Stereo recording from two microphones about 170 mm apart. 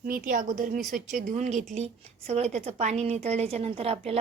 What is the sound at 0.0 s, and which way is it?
A woman's voice, 55° right (ahead or behind).